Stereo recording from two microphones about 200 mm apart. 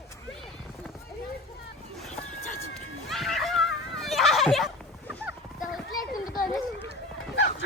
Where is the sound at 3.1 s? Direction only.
Centre (ahead or behind).